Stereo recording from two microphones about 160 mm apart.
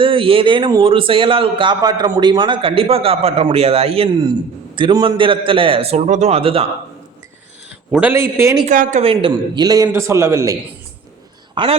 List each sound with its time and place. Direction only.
0.0 s a man's voice: 35° right (ahead or behind)
7.9 s a man's voice: 15° right (ahead or behind)
8.6 s speech: 55° right (ahead or behind)
9.0 s a man's voice: 30° right (ahead or behind)
11.5 s speech: 35° right (ahead or behind)